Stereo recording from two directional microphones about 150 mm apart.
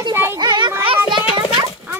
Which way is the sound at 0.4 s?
30° right (ahead or behind).